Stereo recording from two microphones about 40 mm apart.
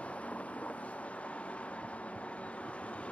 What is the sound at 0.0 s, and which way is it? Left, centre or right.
Vehicle, left.